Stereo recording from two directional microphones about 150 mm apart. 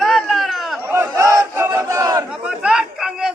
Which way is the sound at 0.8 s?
15° right (ahead or behind).